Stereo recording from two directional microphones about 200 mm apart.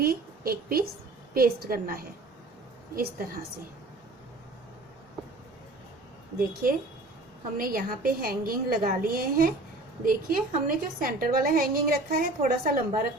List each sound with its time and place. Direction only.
0.0 s a woman's voice: 50° right (ahead or behind)
6.4 s a woman's voice: 45° right (ahead or behind)